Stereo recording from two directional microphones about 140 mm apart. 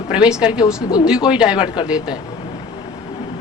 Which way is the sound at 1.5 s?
35° left (ahead or behind).